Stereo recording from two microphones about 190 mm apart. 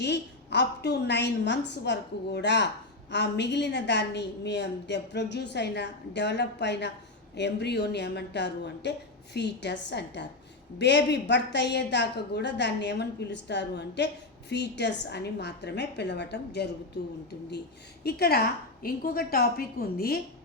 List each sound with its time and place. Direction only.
0.0 s a woman's voice: 65° left (ahead or behind)
18.0 s a woman's voice: 55° left (ahead or behind)